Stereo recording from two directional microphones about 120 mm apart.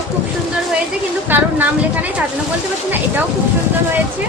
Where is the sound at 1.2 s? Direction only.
15° right (ahead or behind).